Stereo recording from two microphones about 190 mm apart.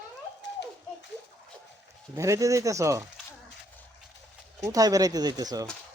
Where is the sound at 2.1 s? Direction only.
15° right (ahead or behind).